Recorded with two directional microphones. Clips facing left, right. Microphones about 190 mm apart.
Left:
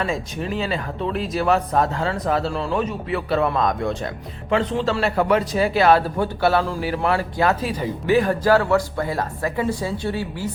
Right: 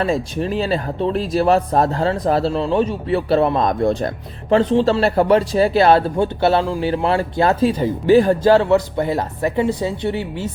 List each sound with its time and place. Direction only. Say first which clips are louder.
0.0 s speech: right 5 dB; 35° right (ahead or behind)